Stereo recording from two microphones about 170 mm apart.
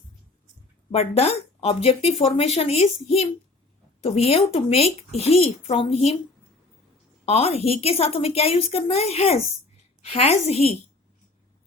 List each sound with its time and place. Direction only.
0.9 s speech: 35° left (ahead or behind)
7.3 s speech: 35° left (ahead or behind)